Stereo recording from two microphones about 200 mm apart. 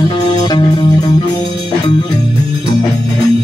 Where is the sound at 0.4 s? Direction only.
20° left (ahead or behind).